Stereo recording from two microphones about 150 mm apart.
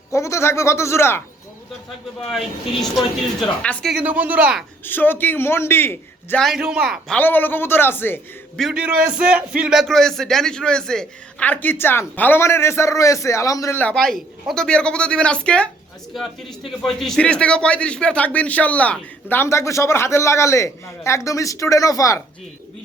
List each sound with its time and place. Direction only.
0.1 s speech: 20° left (ahead or behind)
3.6 s speech: 5° left (ahead or behind)
3.9 s speech: 10° right (ahead or behind)
4.9 s speech: 15° left (ahead or behind)
6.4 s a man's voice: centre (ahead or behind)
7.2 s speech: 10° left (ahead or behind)
8.5 s a man's voice: 5° right (ahead or behind); by 22.2 s 20° left (ahead or behind)